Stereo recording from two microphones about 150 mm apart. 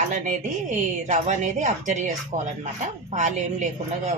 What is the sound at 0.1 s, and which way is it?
Speech, 55° right (ahead or behind).